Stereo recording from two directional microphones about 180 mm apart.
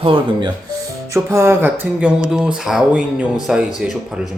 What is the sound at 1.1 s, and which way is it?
A man's voice, 15° right (ahead or behind).